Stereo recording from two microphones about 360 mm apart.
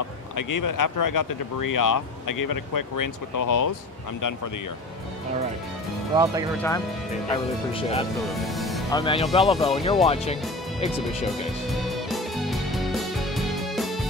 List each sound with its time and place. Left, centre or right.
0.4 s speech: left
6.1 s speech: centre
7.2 s speech: centre
8.3 s speech: centre
8.9 s speech: centre
9.6 s speech: centre
10.0 s speech: centre
11.8 s music: centre